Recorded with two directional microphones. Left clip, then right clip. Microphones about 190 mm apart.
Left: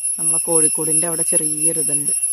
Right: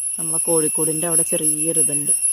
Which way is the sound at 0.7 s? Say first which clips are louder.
Right 1 dB; 5° right (ahead or behind).